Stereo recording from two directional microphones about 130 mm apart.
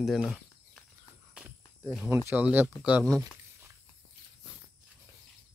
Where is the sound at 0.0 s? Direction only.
Centre (ahead or behind).